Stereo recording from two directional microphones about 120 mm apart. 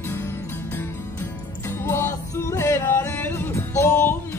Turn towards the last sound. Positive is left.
turn(degrees=20)  # may be behind; listen again after turning